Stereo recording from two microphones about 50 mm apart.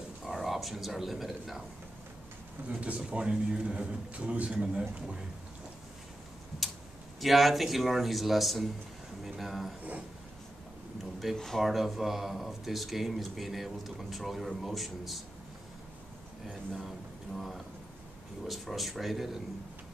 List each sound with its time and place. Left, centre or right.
0.2 s speech: centre
2.7 s a man's voice: right
7.2 s speech: centre
11.3 s speech: centre
16.4 s speech: centre
18.5 s speech: centre